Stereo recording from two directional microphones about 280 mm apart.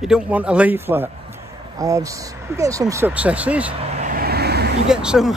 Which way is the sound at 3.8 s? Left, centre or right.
Right.